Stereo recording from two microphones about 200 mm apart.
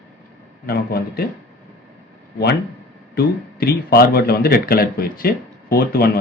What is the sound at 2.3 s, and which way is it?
Speech, 55° left (ahead or behind).